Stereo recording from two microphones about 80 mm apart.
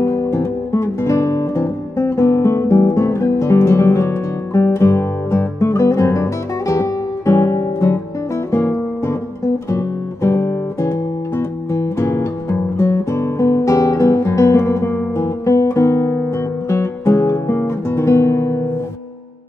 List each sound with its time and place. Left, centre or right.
0.0 s guitar: left
5.6 s music: left
8.5 s guitar: left